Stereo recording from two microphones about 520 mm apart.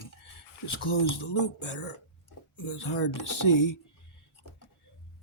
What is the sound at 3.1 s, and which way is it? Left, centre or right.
Speech, left.